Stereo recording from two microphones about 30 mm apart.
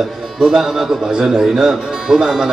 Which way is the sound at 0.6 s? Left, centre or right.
Centre.